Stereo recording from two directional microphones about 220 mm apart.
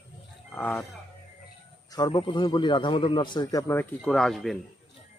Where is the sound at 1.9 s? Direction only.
20° left (ahead or behind); by 4.6 s centre (ahead or behind).